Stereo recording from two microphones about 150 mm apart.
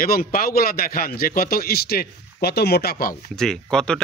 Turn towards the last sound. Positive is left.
turn(degrees=5)  # may be behind; listen again after turning